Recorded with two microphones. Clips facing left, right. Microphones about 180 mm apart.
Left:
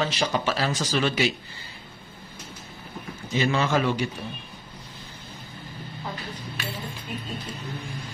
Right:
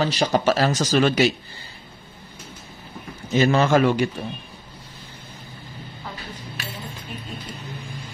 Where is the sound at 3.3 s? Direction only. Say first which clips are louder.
Right 6 dB; 45° right (ahead or behind).